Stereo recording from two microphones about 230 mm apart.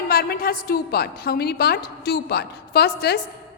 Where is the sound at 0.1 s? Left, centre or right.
Left.